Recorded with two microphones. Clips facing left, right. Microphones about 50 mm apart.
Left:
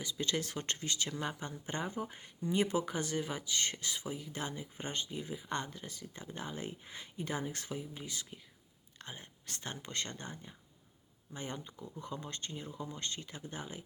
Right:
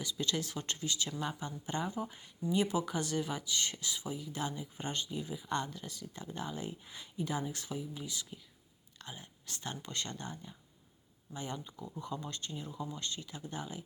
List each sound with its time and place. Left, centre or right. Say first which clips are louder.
0.0 s speech: even; left